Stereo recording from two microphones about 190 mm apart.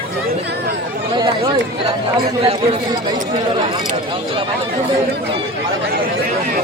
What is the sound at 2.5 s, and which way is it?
Speech, 20° right (ahead or behind).